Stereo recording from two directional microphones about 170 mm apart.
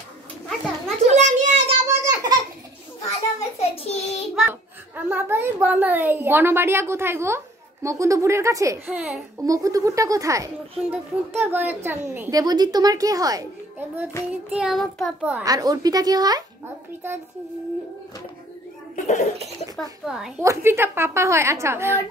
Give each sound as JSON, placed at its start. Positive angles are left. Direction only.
{"t": 1.0, "sound": "a sound", "side_deg": -45}
{"t": 1.9, "sound": "a sound", "side_deg": -15}
{"t": 3.1, "sound": "child singing", "side_deg": 40}
{"t": 4.4, "sound": "a child's voice", "side_deg": -10}
{"t": 9.4, "sound": "a woman's voice", "side_deg": -20}
{"t": 14.6, "sound": "a woman's voice", "side_deg": 0}
{"t": 15.4, "sound": "a woman's voice", "side_deg": -20}
{"t": 18.9, "sound": "a child's voice", "side_deg": 45}
{"t": 19.8, "sound": "a woman's voice", "side_deg": 0}
{"t": 20.4, "sound": "a child's voice", "side_deg": -15}